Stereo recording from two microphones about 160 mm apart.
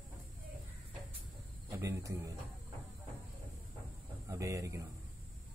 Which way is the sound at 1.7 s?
15° right (ahead or behind).